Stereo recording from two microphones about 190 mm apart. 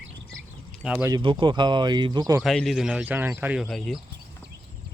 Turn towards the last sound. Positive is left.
turn(degrees=5)  # may be behind; listen again after turning